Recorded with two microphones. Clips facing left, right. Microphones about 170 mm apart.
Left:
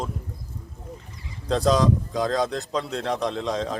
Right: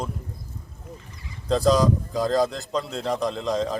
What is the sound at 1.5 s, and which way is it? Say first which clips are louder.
Speech: right 1 dB; centre (ahead or behind).